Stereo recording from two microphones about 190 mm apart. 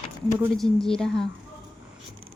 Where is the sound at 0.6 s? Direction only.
Centre (ahead or behind).